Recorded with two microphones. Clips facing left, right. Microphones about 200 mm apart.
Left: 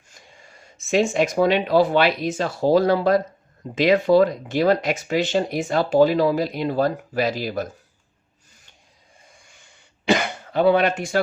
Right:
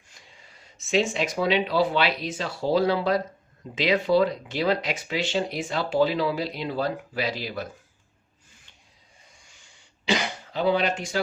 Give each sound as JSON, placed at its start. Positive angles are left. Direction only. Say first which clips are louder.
{"t": 0.1, "sound": "speech", "louder": "left 5 dB", "side_deg": 45}
{"t": 10.1, "sound": "cough", "louder": "left 6 dB", "side_deg": 55}